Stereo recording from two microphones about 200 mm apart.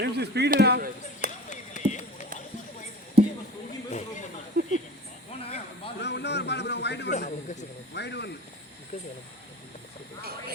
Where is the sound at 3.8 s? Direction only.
35° left (ahead or behind).